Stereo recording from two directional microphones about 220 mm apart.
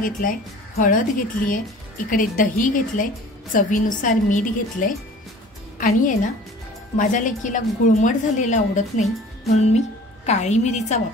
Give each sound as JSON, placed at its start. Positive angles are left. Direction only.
{"t": 0.0, "sound": "a woman's voice", "side_deg": 40}